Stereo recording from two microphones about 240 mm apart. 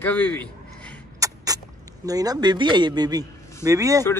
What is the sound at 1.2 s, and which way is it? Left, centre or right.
Rodents, centre.